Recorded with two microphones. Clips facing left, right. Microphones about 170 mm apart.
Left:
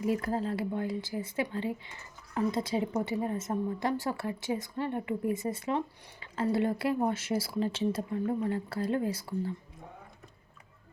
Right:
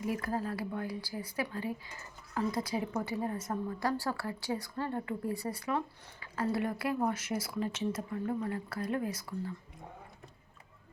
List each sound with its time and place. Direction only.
0.0 s speech: 25° left (ahead or behind)